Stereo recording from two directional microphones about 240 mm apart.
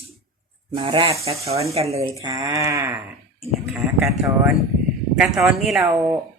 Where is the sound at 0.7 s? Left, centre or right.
Right.